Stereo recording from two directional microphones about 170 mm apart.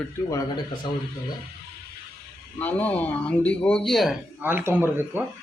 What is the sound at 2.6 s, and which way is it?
A man's voice, 10° left (ahead or behind).